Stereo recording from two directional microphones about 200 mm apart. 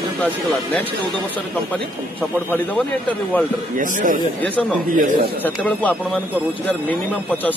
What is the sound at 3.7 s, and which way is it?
Speech, 40° right (ahead or behind).